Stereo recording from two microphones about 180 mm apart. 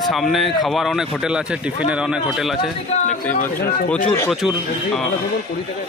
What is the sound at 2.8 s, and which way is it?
Speech, 40° left (ahead or behind).